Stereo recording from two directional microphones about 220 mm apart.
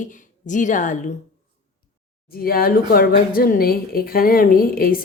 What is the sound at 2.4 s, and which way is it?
Speech, 45° left (ahead or behind).